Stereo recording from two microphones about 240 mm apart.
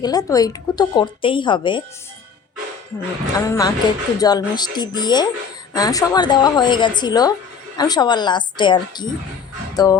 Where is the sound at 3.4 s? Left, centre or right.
Centre.